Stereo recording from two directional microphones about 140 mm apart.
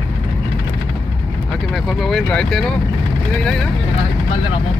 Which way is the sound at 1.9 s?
Centre (ahead or behind).